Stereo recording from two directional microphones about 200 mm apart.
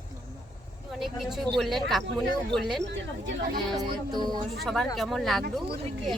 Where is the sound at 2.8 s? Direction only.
65° right (ahead or behind).